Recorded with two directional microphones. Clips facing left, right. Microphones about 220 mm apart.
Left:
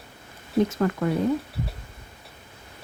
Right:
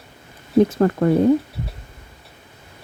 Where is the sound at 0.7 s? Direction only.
40° right (ahead or behind).